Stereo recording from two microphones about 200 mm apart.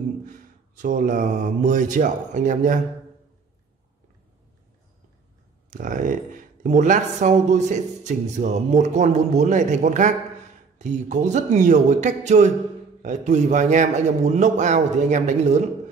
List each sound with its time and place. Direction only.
0.2 s mantra: 40° right (ahead or behind)
5.7 s speech: 40° right (ahead or behind)